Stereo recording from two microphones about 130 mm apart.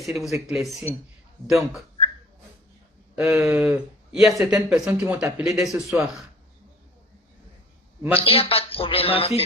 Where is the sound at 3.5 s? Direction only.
10° right (ahead or behind).